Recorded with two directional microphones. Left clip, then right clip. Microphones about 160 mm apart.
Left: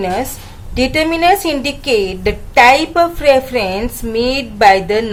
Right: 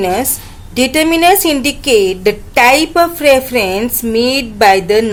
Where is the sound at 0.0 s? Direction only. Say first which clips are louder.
Right 3 dB; 35° right (ahead or behind).